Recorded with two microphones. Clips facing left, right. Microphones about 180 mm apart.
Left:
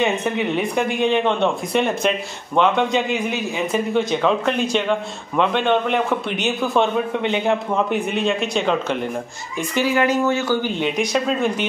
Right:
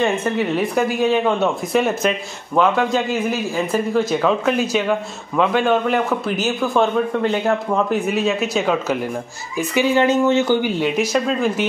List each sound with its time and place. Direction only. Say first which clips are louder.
0.0 s speech: right 1 dB; centre (ahead or behind)
9.9 s speech: right 4 dB; 25° right (ahead or behind)
10.8 s speech: right 2 dB; centre (ahead or behind)